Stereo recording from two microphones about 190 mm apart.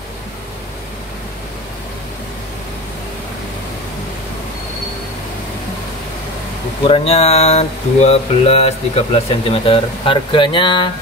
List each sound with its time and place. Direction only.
6.9 s speech: 30° left (ahead or behind)